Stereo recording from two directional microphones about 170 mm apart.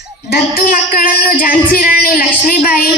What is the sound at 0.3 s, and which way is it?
A man's voice, 60° left (ahead or behind).